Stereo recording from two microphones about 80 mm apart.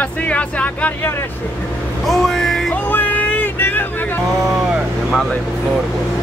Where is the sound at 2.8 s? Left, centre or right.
Left.